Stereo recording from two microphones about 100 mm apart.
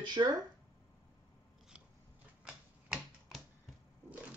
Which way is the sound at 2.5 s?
10° right (ahead or behind).